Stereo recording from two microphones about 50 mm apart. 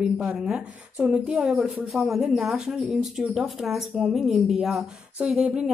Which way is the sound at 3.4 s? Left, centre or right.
Centre.